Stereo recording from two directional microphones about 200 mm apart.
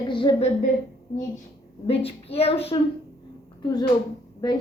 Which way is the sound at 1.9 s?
30° left (ahead or behind).